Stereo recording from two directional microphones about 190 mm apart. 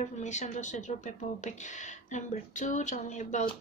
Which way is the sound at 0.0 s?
40° left (ahead or behind).